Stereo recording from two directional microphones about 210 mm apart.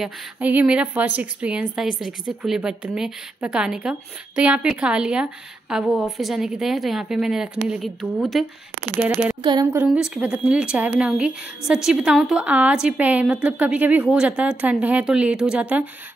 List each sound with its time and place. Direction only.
0.0 s a woman's voice: 5° right (ahead or behind)
9.4 s a woman's voice: 20° right (ahead or behind)
9.8 s a woman's voice: centre (ahead or behind)